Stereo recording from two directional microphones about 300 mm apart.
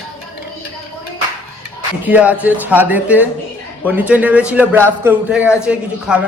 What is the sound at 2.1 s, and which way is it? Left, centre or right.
A man's voice, centre.